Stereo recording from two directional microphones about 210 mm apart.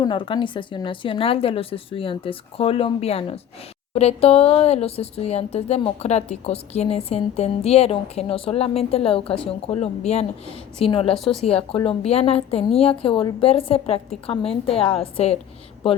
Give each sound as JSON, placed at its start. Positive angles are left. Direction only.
{"t": 0.0, "sound": "speech", "side_deg": 25}
{"t": 11.1, "sound": "speech", "side_deg": 0}
{"t": 11.4, "sound": "speech", "side_deg": 25}